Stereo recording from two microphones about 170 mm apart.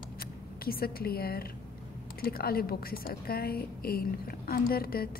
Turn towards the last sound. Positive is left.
turn(degrees=60)  # may be behind; listen again after turning